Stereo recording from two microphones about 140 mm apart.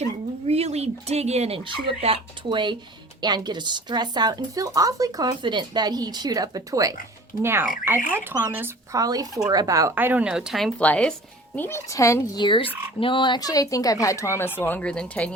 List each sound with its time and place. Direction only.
0.4 s speech: 45° right (ahead or behind); by 6.9 s 25° right (ahead or behind)
8.1 s speech: 15° right (ahead or behind)
9.9 s speech: 10° right (ahead or behind)
10.8 s speech: 10° left (ahead or behind)
12.4 s frog: 35° left (ahead or behind)
13.0 s speech: 35° left (ahead or behind); by 15.3 s 10° left (ahead or behind)